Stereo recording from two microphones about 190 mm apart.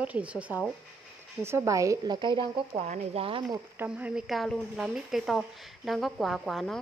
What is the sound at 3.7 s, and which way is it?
Speech, 5° right (ahead or behind).